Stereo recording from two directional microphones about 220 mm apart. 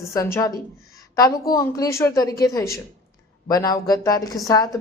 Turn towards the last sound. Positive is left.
turn(degrees=15)  # may be behind; listen again after turning